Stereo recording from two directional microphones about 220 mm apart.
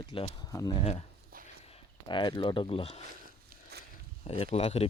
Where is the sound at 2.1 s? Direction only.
20° left (ahead or behind).